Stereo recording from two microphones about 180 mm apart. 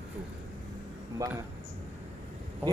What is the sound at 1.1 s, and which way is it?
Speech, 20° right (ahead or behind).